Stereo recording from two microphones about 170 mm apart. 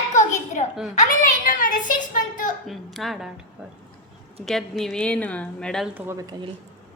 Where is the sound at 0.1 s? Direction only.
45° left (ahead or behind).